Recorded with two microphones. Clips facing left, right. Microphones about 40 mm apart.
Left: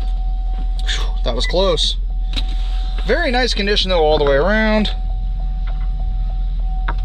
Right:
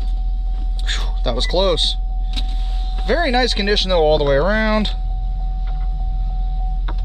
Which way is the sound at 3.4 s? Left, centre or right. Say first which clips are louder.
Even; left.